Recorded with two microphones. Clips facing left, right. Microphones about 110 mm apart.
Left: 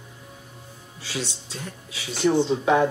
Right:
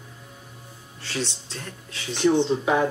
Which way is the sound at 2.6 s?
5° right (ahead or behind).